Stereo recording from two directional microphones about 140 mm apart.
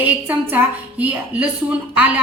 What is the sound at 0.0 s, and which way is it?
A woman's voice, 10° right (ahead or behind).